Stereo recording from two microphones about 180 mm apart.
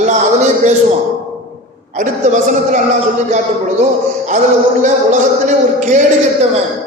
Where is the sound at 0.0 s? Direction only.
40° right (ahead or behind).